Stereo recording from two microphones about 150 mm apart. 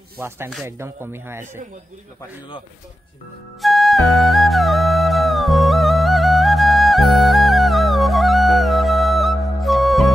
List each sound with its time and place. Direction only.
0.2 s speech: 15° right (ahead or behind)
3.6 s music: centre (ahead or behind)